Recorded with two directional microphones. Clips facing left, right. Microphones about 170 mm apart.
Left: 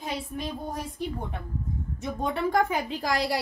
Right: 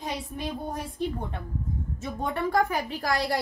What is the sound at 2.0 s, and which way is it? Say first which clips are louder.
A woman's voice: left 1 dB; 15° left (ahead or behind).